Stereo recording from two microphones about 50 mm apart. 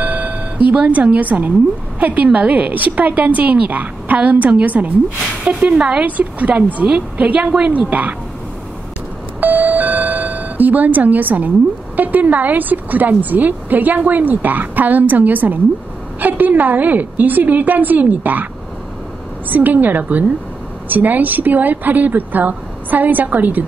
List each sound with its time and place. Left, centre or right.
0.0 s doorbell: right
2.0 s a woman's voice: right
9.4 s doorbell: right
12.0 s a woman's voice: right
19.5 s a woman's voice: right